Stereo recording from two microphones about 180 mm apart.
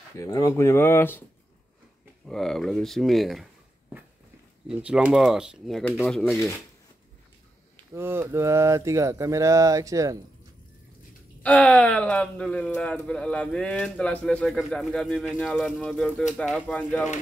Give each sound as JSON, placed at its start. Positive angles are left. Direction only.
{"t": 0.2, "sound": "speech", "side_deg": 20}
{"t": 2.2, "sound": "speech", "side_deg": 0}
{"t": 4.6, "sound": "speech", "side_deg": -5}
{"t": 6.3, "sound": "speech", "side_deg": 15}
{"t": 7.9, "sound": "speech", "side_deg": -15}
{"t": 11.4, "sound": "speech", "side_deg": 5}